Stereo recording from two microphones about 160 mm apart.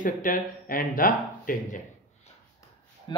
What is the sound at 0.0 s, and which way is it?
Speech, 60° left (ahead or behind).